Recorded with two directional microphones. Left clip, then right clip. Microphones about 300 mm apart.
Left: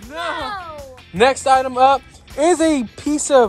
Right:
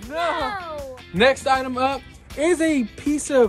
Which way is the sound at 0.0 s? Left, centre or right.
Centre.